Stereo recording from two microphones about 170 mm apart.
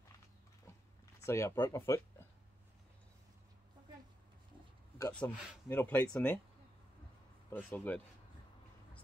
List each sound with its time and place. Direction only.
1.2 s speech: 15° left (ahead or behind)
5.2 s speech: 10° left (ahead or behind)
7.4 s speech: 10° left (ahead or behind)